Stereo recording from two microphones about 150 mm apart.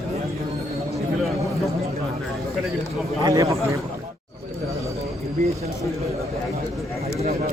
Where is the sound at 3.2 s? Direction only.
20° right (ahead or behind).